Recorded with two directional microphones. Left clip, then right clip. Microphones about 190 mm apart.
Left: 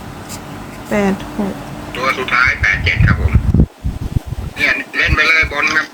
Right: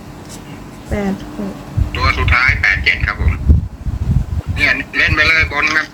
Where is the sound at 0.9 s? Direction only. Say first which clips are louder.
Left 5 dB; 35° left (ahead or behind).